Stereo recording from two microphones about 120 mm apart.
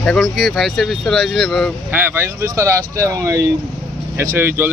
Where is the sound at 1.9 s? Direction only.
15° right (ahead or behind).